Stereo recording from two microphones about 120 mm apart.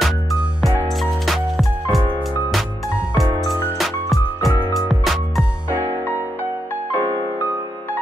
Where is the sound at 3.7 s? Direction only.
Centre (ahead or behind).